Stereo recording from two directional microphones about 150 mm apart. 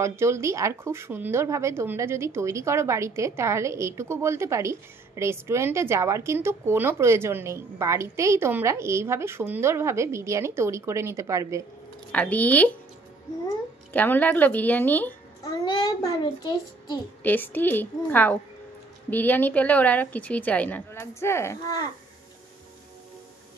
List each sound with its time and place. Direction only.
0.0 s speech: 20° right (ahead or behind)
12.1 s a woman's voice: 10° left (ahead or behind)
13.9 s a woman's voice: 10° left (ahead or behind)
15.6 s a child's voice: 25° left (ahead or behind)
17.2 s a woman's voice: 10° left (ahead or behind)